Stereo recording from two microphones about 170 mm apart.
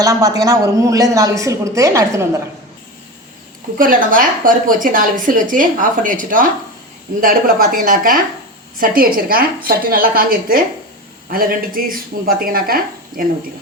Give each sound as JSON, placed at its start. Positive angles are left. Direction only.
{"t": 0.0, "sound": "a woman's voice", "side_deg": -20}
{"t": 3.8, "sound": "a woman's voice", "side_deg": -55}